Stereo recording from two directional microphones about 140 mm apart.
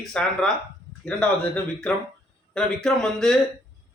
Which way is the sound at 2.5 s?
5° left (ahead or behind).